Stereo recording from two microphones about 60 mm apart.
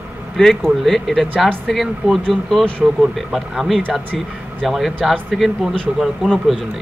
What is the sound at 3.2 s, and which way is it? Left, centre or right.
Speech, centre.